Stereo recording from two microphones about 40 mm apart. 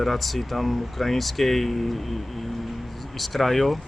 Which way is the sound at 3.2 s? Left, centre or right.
Centre.